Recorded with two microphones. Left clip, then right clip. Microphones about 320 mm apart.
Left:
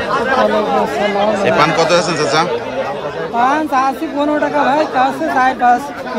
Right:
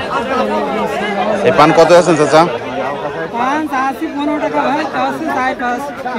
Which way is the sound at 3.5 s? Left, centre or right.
Centre.